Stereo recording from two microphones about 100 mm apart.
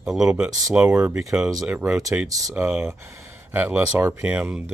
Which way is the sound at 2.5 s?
15° right (ahead or behind).